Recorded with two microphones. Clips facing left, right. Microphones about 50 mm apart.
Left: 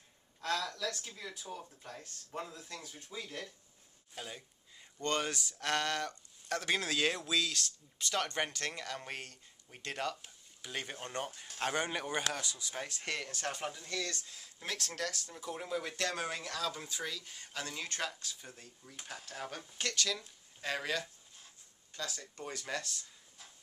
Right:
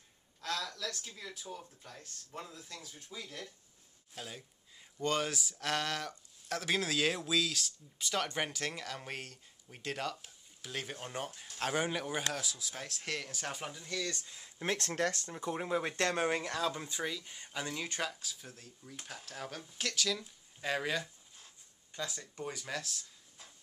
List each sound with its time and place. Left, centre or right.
0.4 s a sound: centre
0.7 s speech: centre
3.2 s speech: left
4.1 s speech: centre
11.9 s speech: centre
14.1 s speech: right
15.3 s speech: right
17.0 s speech: centre
18.1 s speech: centre